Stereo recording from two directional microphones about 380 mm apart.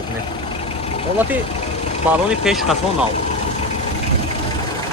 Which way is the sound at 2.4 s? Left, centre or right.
Centre.